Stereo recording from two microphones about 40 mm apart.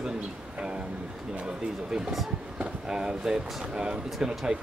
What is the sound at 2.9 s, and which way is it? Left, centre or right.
Speech, centre.